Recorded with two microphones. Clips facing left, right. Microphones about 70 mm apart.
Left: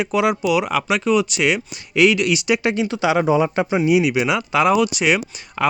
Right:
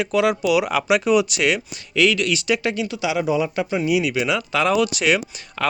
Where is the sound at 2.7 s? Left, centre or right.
Left.